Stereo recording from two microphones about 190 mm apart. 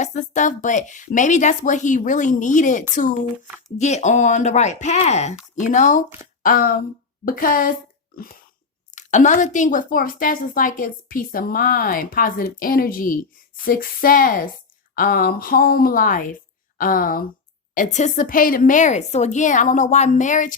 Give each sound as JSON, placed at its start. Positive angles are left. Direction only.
{"t": 0.0, "sound": "a woman's voice", "side_deg": 40}